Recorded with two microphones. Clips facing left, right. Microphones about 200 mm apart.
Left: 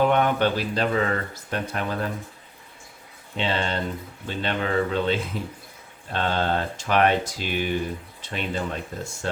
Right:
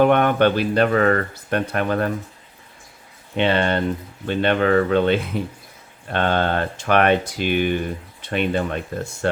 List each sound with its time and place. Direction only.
0.0 s speech: 60° right (ahead or behind)
3.3 s speech: 60° right (ahead or behind)